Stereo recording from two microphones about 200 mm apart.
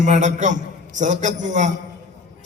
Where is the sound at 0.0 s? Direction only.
40° right (ahead or behind).